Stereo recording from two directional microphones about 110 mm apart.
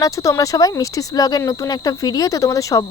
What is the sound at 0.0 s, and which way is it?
Speech, 30° left (ahead or behind).